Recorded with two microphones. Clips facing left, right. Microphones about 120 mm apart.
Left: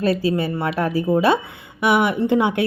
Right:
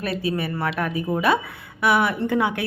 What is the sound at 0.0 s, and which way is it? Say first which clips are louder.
A woman's voice: left 6 dB; 35° left (ahead or behind).